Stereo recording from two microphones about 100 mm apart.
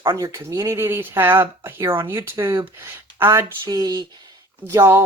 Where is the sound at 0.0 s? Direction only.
30° right (ahead or behind).